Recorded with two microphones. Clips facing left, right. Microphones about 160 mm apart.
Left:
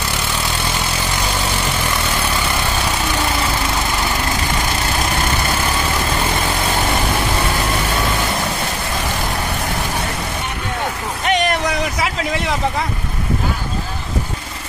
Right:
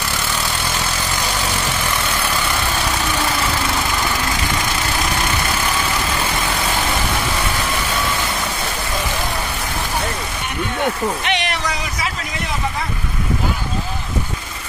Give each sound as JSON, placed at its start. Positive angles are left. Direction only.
{"t": 11.2, "sound": "boat", "side_deg": 45}